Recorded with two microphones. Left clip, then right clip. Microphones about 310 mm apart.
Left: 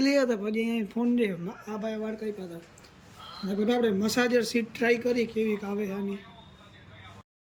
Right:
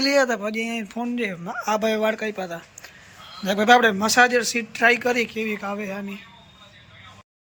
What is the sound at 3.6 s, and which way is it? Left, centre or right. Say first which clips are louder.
A man's voice: right 11 dB; centre.